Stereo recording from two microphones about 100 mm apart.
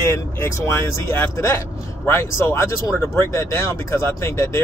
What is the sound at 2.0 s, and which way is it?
Speech, 25° left (ahead or behind).